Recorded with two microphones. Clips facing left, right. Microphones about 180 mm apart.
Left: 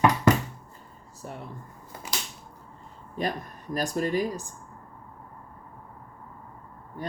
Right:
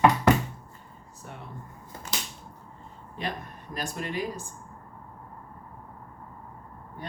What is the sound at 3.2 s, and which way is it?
Speech, 45° left (ahead or behind).